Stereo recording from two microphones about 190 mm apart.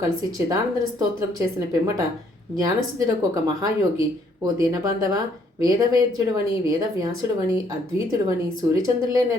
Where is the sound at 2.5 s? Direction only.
15° right (ahead or behind).